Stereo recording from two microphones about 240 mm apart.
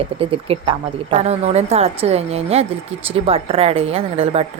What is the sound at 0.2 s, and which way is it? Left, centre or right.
Speech, right.